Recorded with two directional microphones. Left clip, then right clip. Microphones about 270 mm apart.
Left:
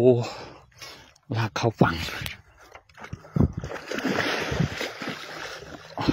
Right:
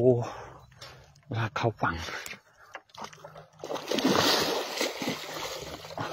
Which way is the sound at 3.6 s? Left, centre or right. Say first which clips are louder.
Right 2 dB; centre.